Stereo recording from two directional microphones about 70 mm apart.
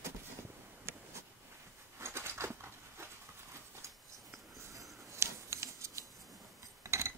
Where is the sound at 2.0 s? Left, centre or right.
Right.